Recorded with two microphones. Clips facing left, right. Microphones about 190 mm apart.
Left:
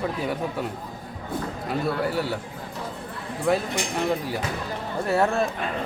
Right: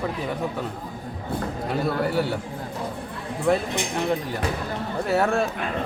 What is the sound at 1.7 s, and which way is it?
Speech, centre (ahead or behind).